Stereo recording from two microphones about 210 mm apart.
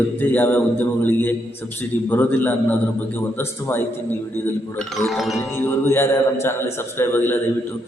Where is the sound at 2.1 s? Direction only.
10° left (ahead or behind).